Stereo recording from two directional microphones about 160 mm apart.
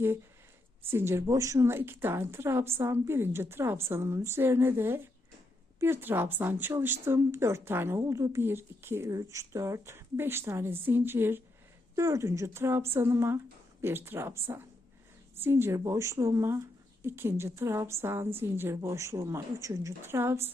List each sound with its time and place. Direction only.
0.9 s a woman's voice: 15° right (ahead or behind)